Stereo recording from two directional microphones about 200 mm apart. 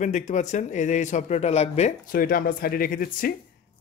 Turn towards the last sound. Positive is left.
turn(degrees=45)  # may be behind; listen again after turning